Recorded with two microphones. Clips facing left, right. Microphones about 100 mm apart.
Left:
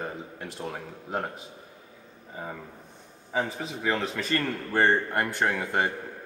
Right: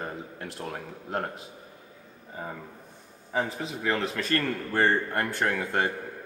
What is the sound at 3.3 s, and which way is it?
A man's voice, centre (ahead or behind).